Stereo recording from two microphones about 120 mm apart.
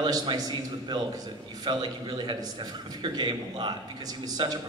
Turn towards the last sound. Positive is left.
turn(degrees=-35)  # may be behind; listen again after turning